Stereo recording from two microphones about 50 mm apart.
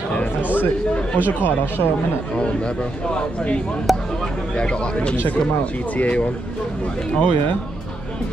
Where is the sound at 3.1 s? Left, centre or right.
Left.